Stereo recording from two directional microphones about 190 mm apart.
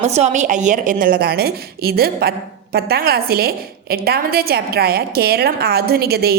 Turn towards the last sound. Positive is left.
turn(degrees=-55)  # may be behind; listen again after turning